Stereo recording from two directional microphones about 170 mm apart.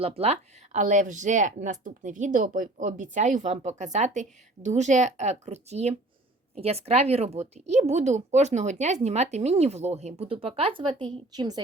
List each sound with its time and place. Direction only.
0.0 s speech: 35° right (ahead or behind)